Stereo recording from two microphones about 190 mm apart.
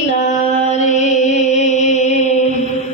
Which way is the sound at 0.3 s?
40° left (ahead or behind).